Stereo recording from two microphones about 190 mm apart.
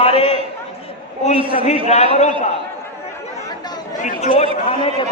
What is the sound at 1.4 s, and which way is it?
Speech, 30° right (ahead or behind).